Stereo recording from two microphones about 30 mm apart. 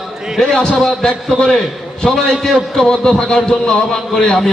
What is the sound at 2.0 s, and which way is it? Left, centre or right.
Speech, centre.